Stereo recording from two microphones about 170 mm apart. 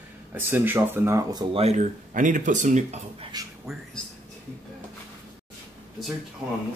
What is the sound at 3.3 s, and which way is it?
Speech, 25° right (ahead or behind).